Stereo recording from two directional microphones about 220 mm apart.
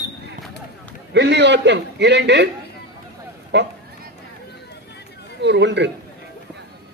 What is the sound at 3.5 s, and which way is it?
Speech, 50° right (ahead or behind).